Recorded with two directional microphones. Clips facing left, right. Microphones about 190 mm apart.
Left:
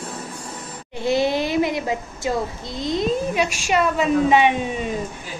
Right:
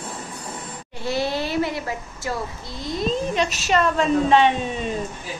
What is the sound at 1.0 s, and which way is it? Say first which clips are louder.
Speech: left 5 dB; 15° left (ahead or behind).